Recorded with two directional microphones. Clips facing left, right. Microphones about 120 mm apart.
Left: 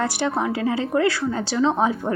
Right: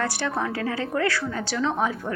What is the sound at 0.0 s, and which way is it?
A woman's voice, 20° left (ahead or behind).